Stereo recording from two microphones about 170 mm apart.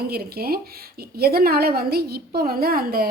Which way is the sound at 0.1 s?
65° right (ahead or behind).